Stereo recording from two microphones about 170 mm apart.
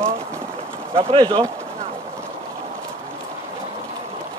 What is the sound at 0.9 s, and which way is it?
Speech, 35° right (ahead or behind).